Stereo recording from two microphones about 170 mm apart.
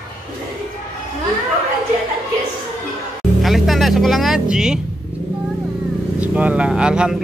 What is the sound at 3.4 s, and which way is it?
Music, centre (ahead or behind).